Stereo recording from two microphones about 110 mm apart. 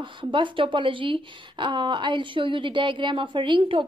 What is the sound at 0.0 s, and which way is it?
Speech, 50° right (ahead or behind).